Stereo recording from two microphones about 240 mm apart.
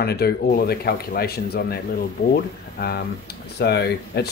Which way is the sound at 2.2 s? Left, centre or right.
Left.